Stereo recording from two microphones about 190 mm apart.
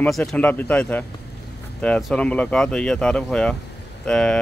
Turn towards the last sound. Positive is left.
turn(degrees=5)  # may be behind; listen again after turning